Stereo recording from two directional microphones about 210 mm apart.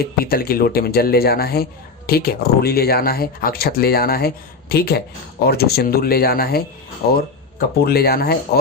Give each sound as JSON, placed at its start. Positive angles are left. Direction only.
{"t": 0.0, "sound": "speech", "side_deg": 45}